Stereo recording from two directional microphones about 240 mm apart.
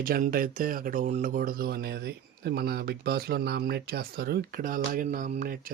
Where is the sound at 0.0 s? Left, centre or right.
Right.